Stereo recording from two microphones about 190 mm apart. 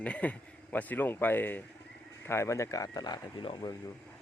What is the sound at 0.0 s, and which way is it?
Speech, 5° left (ahead or behind).